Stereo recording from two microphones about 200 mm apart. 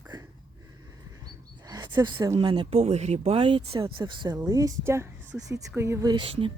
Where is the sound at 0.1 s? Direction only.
20° right (ahead or behind).